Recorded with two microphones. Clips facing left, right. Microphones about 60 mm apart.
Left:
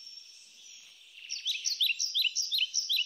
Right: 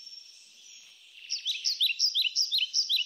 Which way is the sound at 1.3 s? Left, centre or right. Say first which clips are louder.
Right 1 dB; centre.